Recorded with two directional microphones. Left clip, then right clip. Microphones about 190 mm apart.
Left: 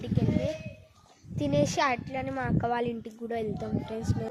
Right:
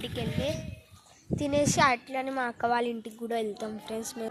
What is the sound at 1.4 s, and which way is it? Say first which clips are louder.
Speech: right 2 dB; 10° left (ahead or behind).